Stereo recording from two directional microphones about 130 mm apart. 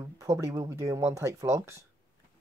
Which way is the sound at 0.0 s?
25° right (ahead or behind).